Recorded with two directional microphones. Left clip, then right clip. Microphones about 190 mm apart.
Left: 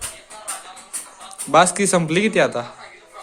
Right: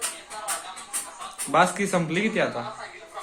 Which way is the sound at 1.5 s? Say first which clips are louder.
Left 6 dB; 40° left (ahead or behind).